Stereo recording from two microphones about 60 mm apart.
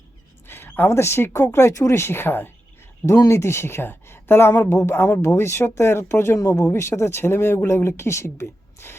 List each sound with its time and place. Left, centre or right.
0.4 s a sound: left
0.9 s speech: left
3.1 s speech: left
4.7 s speech: left